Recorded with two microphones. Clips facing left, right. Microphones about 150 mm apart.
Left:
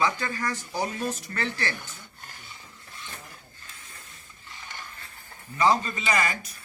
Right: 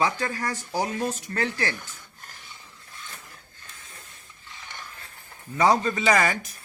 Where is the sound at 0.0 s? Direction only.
40° right (ahead or behind).